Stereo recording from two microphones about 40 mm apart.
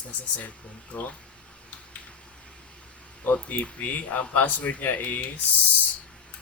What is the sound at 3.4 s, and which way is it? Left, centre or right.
Speech, left.